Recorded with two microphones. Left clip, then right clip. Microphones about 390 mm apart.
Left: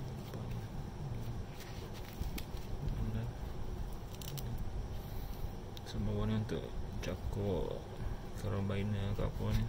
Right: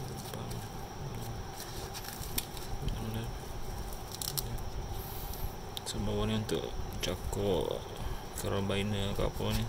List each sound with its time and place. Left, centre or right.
5.9 s speech: centre